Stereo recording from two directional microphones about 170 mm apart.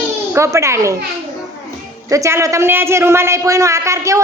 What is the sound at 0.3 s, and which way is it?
Speech, 15° right (ahead or behind).